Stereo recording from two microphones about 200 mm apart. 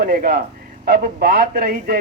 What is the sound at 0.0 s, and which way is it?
Speech, 50° right (ahead or behind).